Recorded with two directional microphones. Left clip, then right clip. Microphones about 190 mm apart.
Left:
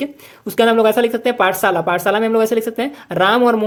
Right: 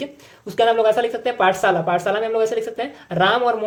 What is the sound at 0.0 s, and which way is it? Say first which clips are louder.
Speech: left 5 dB; 30° left (ahead or behind).